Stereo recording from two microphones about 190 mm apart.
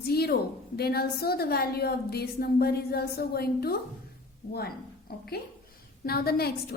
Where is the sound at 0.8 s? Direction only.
55° left (ahead or behind).